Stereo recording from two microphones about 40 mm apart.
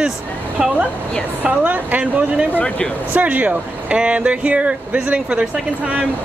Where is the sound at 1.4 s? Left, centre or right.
Right.